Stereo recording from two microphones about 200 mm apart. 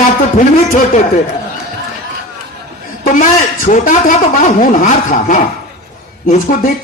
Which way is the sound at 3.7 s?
35° left (ahead or behind).